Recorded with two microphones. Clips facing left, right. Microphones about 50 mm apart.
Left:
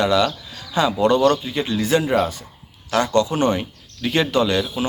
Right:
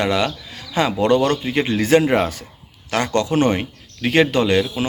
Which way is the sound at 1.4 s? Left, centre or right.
Right.